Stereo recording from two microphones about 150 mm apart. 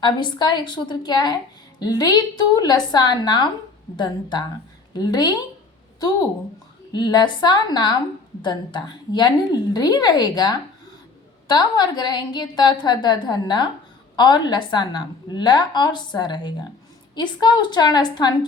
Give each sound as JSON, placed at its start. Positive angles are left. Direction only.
{"t": 0.0, "sound": "a woman's voice", "side_deg": 30}
{"t": 6.9, "sound": "a woman's voice", "side_deg": 30}